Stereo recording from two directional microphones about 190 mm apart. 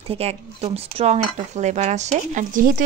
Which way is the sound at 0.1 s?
30° right (ahead or behind).